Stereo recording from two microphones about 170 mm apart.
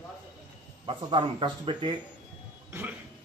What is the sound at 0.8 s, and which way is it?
A man's voice, 30° right (ahead or behind).